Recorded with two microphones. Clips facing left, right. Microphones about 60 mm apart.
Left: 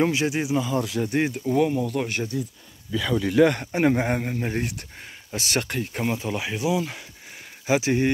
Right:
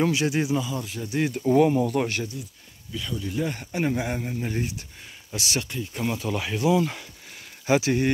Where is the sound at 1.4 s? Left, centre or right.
Centre.